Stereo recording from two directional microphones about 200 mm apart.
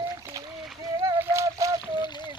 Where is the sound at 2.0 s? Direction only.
20° left (ahead or behind).